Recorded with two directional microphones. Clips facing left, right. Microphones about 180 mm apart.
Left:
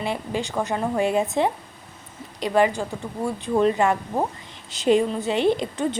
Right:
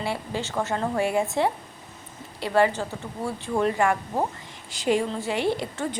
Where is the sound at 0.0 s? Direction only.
20° left (ahead or behind).